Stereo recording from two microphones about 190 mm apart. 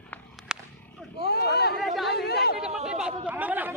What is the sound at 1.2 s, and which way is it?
Speech, 60° left (ahead or behind).